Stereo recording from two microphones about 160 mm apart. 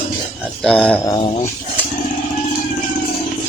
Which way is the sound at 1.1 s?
35° left (ahead or behind).